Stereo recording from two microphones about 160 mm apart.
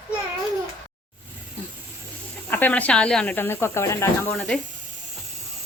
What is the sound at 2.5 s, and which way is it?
Speech, 10° left (ahead or behind).